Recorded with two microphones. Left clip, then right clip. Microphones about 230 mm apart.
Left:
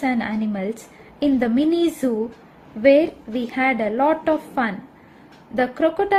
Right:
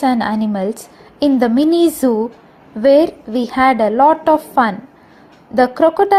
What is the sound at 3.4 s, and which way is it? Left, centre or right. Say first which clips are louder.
Speech: right 8 dB; centre.